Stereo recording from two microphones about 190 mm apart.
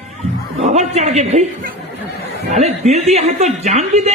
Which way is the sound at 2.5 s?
35° right (ahead or behind).